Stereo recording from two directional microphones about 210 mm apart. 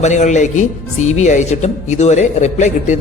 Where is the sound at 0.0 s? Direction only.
35° left (ahead or behind).